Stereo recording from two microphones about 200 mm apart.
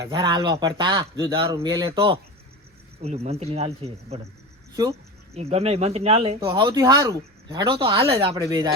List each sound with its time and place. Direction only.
0.0 s speech: 20° right (ahead or behind)
3.0 s speech: 30° right (ahead or behind)
5.3 s speech: 30° right (ahead or behind)